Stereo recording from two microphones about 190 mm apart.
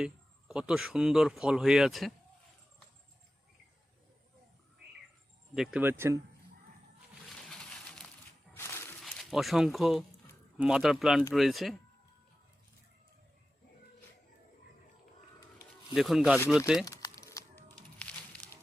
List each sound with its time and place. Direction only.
0.0 s speech: 5° right (ahead or behind)
5.5 s speech: 10° right (ahead or behind)
7.3 s a sound: 5° left (ahead or behind)
9.0 s speech: centre (ahead or behind)
15.9 s speech: centre (ahead or behind)
16.8 s crumpling: 20° left (ahead or behind)
18.0 s a sound: 5° left (ahead or behind)